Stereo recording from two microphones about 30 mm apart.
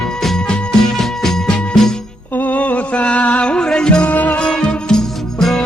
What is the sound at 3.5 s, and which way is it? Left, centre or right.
Music, left.